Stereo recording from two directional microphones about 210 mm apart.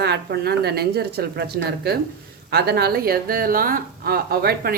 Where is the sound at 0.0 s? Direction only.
50° right (ahead or behind).